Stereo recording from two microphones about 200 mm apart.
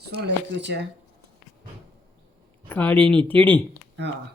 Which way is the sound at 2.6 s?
10° left (ahead or behind).